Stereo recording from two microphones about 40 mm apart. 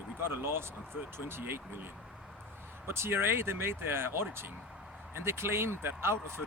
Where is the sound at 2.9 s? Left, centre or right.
Right.